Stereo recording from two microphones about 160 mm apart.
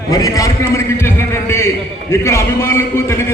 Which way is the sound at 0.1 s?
20° left (ahead or behind).